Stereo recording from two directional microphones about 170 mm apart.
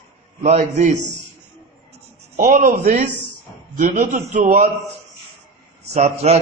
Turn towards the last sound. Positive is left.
turn(degrees=-40)  # may be behind; listen again after turning